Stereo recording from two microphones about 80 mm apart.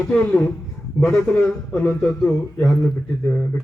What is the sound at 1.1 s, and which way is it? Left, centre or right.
A man's voice, centre.